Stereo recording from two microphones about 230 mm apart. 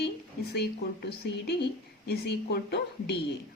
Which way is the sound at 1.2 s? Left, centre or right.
Left.